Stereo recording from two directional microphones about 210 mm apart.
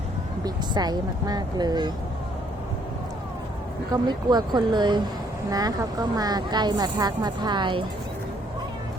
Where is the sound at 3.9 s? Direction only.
20° right (ahead or behind).